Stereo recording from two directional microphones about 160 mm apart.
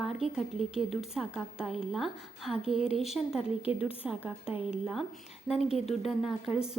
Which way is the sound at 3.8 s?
35° left (ahead or behind).